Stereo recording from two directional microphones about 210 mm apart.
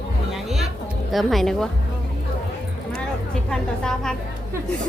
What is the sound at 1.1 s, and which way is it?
Speech, centre (ahead or behind).